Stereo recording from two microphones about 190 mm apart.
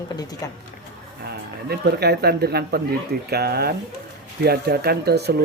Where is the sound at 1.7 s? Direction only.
60° right (ahead or behind).